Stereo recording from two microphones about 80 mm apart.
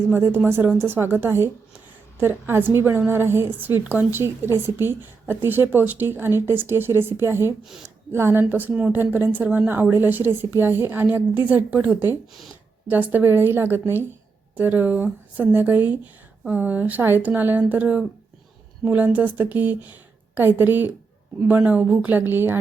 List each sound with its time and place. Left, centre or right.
0.1 s a woman's voice: right